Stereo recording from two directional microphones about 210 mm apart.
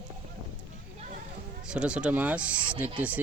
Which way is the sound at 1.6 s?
5° right (ahead or behind).